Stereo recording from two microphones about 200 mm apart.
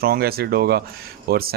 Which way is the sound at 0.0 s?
50° right (ahead or behind).